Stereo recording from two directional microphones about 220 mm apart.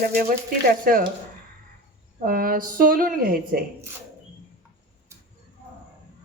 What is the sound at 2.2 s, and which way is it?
A woman's voice, 40° right (ahead or behind).